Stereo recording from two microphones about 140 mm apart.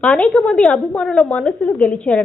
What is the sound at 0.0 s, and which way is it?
A woman's voice, 5° left (ahead or behind).